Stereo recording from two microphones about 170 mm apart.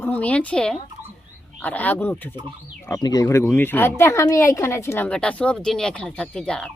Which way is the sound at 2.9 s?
25° left (ahead or behind).